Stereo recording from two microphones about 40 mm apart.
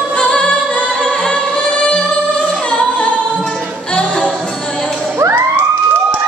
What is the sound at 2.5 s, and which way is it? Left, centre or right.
Music, left.